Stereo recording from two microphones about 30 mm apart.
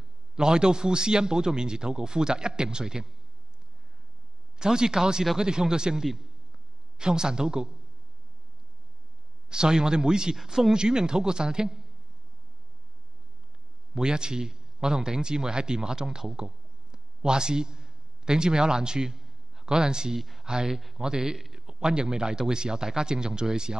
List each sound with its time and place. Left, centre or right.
0.4 s a man's voice: right
4.6 s a man's voice: right
9.5 s a man's voice: right
10.3 s a man's voice: centre
13.9 s a man's voice: right
16.3 s a sound: right
19.1 s a sound: centre
19.6 s a man's voice: right
20.2 s speech: centre
20.4 s speech: right
20.7 s speech: centre
21.0 s a man's voice: right